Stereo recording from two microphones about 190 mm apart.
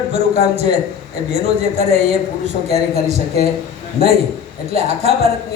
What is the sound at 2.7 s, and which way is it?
Speech, 35° right (ahead or behind).